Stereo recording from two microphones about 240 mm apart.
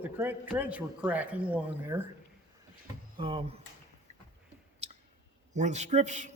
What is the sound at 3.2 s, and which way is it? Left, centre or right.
Speech, right.